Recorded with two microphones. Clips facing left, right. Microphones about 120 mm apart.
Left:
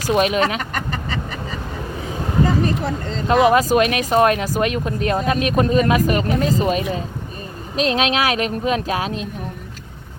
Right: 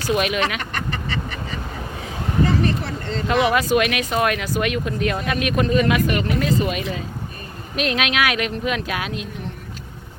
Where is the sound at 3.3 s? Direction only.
40° left (ahead or behind).